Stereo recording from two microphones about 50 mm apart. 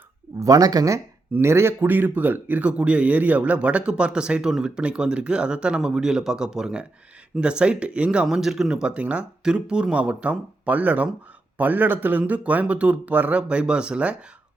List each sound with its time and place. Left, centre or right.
1.4 s speech: right
2.6 s speech: right
8.3 s speech: centre
8.9 s speech: right
13.5 s speech: right